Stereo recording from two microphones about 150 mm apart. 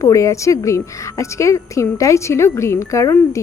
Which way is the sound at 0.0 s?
20° left (ahead or behind).